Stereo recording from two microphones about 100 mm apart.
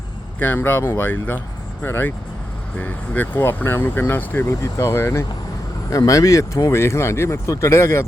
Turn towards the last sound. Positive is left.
turn(degrees=25)  # may be behind; listen again after turning